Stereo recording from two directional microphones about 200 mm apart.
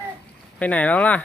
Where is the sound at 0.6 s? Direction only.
5° left (ahead or behind).